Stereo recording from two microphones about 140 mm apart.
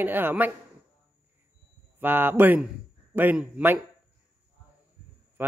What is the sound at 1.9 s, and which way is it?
Speech, 15° right (ahead or behind).